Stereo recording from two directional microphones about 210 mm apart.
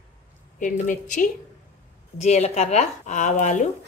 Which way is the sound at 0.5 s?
40° left (ahead or behind).